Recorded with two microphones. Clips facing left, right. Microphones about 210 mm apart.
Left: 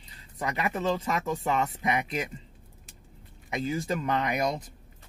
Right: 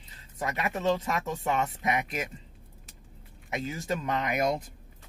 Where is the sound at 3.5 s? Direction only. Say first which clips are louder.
Left 3 dB; centre (ahead or behind).